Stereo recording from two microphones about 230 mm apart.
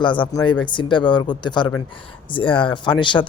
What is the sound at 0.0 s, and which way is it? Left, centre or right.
Speech, left.